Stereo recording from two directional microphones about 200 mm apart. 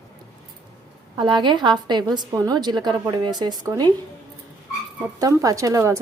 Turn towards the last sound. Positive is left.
turn(degrees=-15)  # may be behind; listen again after turning